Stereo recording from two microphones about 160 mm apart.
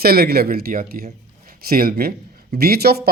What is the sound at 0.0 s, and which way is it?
Speech, 75° right (ahead or behind).